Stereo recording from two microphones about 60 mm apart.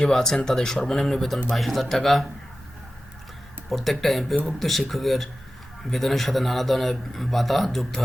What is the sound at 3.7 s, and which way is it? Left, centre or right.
Speech, centre.